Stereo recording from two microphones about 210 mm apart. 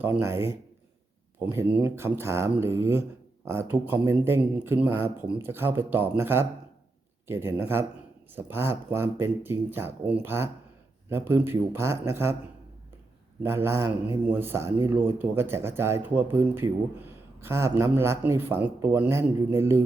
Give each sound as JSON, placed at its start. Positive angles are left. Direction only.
{"t": 0.0, "sound": "speech", "side_deg": -10}
{"t": 13.4, "sound": "speech", "side_deg": -10}